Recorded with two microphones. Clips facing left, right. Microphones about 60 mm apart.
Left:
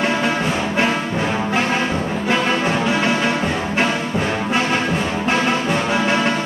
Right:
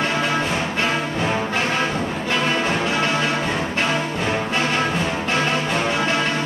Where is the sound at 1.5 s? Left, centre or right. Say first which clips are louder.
Left 2 dB; centre.